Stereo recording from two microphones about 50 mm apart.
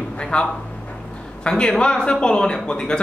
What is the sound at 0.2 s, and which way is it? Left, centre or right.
Speech, centre.